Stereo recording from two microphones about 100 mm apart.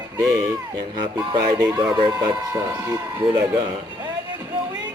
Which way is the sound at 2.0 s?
45° right (ahead or behind).